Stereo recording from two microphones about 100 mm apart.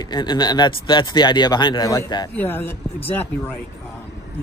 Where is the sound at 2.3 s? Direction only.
20° left (ahead or behind).